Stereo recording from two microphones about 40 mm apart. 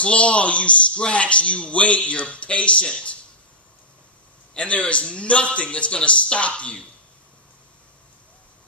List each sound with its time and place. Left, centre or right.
0.0 s a man's voice: left
4.6 s a man's voice: left